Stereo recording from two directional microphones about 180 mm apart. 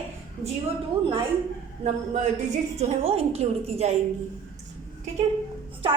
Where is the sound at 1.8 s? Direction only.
40° right (ahead or behind).